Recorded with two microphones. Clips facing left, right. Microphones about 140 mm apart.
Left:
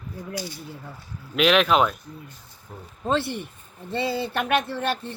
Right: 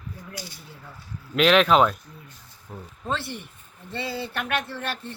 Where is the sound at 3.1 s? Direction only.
20° left (ahead or behind).